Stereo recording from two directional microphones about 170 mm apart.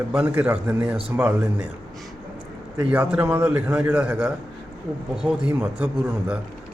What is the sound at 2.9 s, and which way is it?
A man's voice, 10° right (ahead or behind).